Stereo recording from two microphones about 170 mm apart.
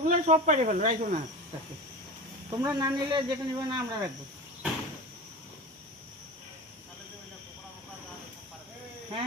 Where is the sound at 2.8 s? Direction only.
25° right (ahead or behind).